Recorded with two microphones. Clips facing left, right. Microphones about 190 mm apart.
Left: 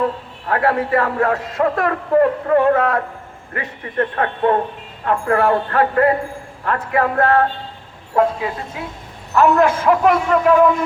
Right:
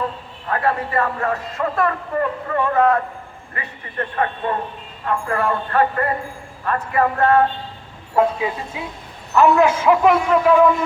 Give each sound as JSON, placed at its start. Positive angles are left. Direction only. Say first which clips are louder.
{"t": 0.4, "sound": "speech", "louder": "left 3 dB", "side_deg": 75}
{"t": 8.2, "sound": "a man's voice", "louder": "left 1 dB", "side_deg": -5}